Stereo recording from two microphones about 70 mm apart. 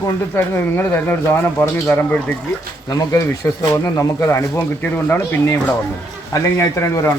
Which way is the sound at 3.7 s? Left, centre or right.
Left.